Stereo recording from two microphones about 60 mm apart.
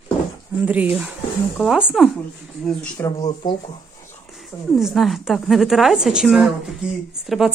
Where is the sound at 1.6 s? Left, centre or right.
Centre.